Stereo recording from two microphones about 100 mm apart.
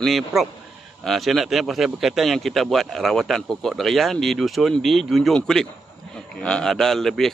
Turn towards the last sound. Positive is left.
turn(degrees=5)  # may be behind; listen again after turning